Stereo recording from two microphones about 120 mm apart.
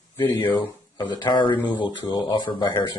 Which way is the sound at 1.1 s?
40° left (ahead or behind).